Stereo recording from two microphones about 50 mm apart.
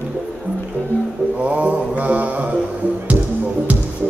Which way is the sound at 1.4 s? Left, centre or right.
Right.